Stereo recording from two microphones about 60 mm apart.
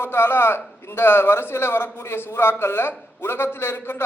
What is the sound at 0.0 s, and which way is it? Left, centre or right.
A man's voice, left.